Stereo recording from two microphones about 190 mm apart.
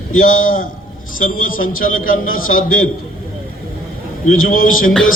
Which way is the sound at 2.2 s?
90° left.